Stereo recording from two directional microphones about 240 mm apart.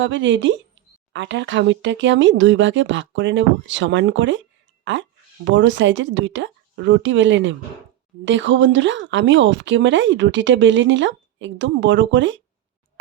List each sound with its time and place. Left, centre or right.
0.0 s speech: right